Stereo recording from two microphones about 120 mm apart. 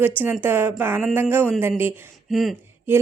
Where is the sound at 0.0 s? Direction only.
15° right (ahead or behind).